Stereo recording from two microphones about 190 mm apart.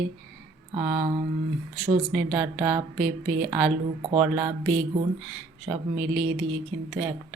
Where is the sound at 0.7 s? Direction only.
30° right (ahead or behind).